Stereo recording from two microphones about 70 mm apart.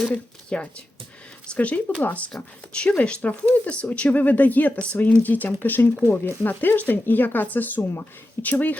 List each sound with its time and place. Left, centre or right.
0.0 s a woman's voice: centre